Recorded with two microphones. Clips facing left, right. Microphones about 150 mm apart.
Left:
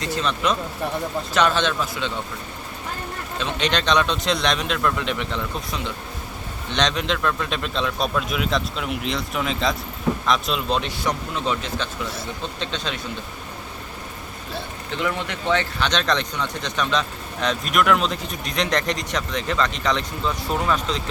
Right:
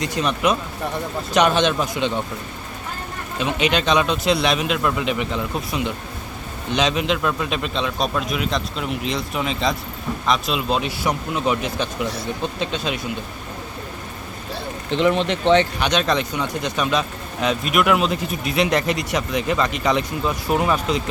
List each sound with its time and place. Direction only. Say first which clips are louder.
0.0 s speech: right 3 dB; 15° right (ahead or behind)
3.3 s a man's voice: right 4 dB; 10° right (ahead or behind)
14.8 s speech: right 8 dB; 25° right (ahead or behind)
15.9 s speech: right 3 dB; 10° right (ahead or behind)